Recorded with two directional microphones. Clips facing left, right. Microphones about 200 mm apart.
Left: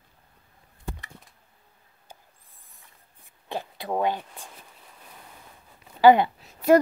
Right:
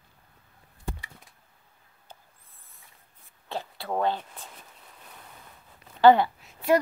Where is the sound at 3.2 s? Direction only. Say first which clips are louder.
Left 2 dB; 15° left (ahead or behind).